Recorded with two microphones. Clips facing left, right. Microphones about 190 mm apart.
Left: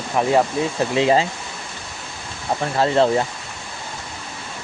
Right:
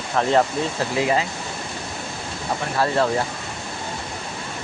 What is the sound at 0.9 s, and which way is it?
Speech, 25° left (ahead or behind).